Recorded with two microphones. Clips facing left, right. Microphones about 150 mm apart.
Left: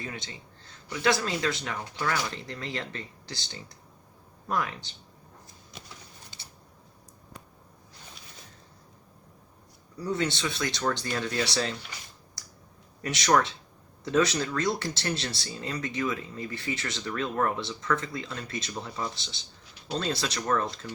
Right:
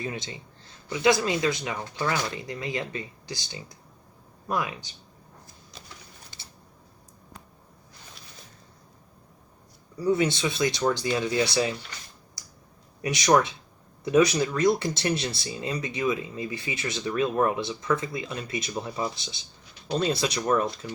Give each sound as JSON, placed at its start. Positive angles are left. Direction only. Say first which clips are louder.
{"t": 0.0, "sound": "speech", "louder": "right 5 dB", "side_deg": -20}
{"t": 10.0, "sound": "speech", "louder": "right 5 dB", "side_deg": -10}
{"t": 13.0, "sound": "speech", "louder": "right 3 dB", "side_deg": -15}